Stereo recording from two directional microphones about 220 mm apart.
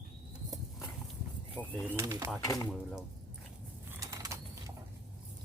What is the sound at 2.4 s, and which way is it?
Speech, 15° left (ahead or behind).